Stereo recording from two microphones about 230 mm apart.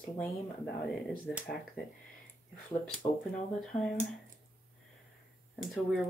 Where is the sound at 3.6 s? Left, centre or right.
Centre.